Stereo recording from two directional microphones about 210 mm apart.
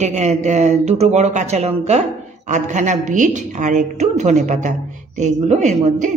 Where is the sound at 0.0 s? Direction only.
30° right (ahead or behind).